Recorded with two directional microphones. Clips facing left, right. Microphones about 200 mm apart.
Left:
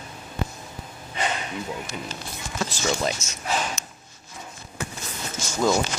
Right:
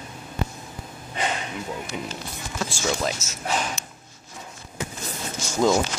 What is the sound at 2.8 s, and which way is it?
Speech, centre (ahead or behind).